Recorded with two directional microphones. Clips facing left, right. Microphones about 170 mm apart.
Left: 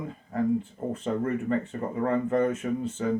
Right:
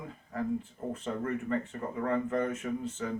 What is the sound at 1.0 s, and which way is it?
Speech, 30° left (ahead or behind).